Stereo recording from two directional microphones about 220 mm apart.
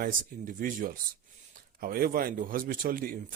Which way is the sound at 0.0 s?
35° right (ahead or behind).